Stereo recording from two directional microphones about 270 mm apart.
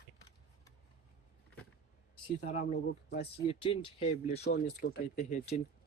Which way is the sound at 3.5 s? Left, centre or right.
Centre.